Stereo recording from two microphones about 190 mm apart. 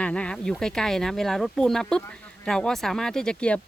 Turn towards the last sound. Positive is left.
turn(degrees=5)  # may be behind; listen again after turning